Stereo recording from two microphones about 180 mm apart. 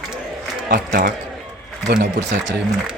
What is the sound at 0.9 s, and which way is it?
Speech, 55° right (ahead or behind).